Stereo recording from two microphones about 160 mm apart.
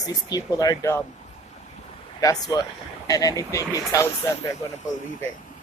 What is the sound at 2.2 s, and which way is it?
A woman's voice, 20° left (ahead or behind).